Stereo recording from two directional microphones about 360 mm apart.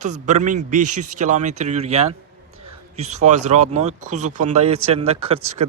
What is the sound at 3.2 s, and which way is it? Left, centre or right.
Speech, centre.